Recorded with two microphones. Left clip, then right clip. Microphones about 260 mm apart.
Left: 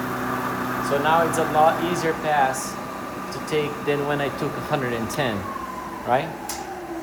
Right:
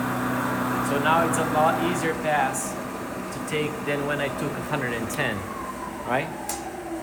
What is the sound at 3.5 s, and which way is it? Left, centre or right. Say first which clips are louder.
Speech: left 4 dB; left.